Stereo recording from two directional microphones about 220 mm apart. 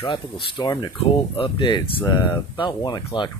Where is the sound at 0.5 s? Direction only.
20° left (ahead or behind).